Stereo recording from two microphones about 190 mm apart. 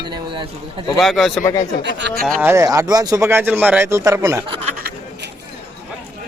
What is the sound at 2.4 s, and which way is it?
Speech, 15° right (ahead or behind).